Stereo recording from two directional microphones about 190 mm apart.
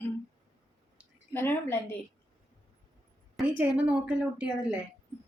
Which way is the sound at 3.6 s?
10° right (ahead or behind).